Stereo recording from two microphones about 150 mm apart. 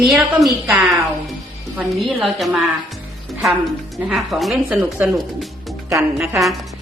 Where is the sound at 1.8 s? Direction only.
Centre (ahead or behind).